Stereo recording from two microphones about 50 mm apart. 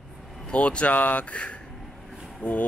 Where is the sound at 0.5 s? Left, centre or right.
Left.